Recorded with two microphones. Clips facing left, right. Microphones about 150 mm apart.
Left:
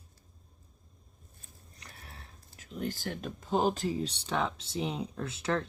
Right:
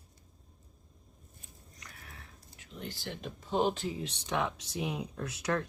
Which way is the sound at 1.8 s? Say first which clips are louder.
Left 1 dB; 30° left (ahead or behind).